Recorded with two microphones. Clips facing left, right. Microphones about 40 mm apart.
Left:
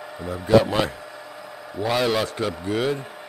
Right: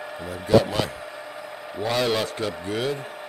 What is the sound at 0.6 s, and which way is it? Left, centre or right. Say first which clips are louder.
Speech: left 2 dB; centre.